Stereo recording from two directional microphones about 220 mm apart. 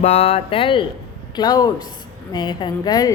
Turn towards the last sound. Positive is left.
turn(degrees=20)  # may be behind; listen again after turning